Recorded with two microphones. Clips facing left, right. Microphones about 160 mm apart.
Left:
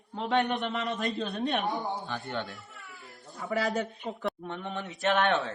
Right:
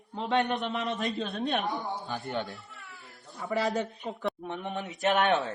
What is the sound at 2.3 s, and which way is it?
Speech, 20° right (ahead or behind).